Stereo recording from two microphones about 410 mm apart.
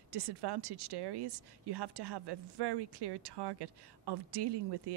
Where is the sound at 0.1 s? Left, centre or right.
Right.